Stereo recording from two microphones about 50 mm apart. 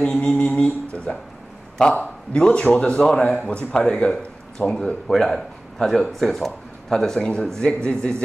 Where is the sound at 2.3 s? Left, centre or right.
Centre.